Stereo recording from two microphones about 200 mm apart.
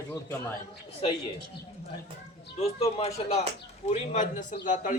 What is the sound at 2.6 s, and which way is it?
Speech, 30° left (ahead or behind).